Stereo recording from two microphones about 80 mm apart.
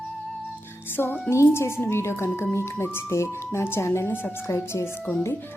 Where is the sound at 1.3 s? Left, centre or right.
Left.